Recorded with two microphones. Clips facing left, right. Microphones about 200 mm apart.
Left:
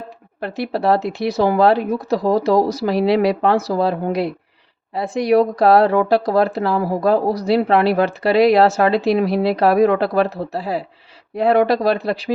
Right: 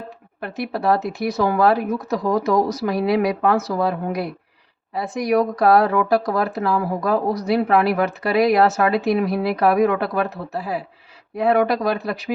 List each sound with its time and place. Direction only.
0.3 s speech: 30° left (ahead or behind)